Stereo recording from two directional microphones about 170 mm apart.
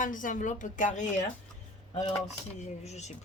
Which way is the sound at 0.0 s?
50° left (ahead or behind).